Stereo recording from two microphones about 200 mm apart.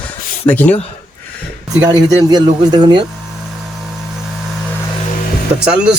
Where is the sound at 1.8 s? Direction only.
15° right (ahead or behind).